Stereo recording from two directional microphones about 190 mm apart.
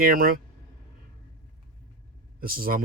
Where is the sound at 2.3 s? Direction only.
50° right (ahead or behind).